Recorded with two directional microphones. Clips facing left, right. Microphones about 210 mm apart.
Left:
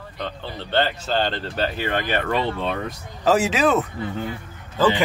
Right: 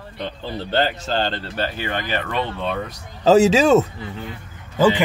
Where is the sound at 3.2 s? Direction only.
25° right (ahead or behind).